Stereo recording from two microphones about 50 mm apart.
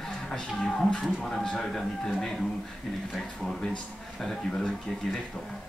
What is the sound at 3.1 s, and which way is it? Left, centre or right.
Speech, centre.